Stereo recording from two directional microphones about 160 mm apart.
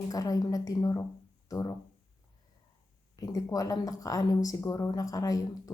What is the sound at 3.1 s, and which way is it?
A woman's voice, 20° left (ahead or behind).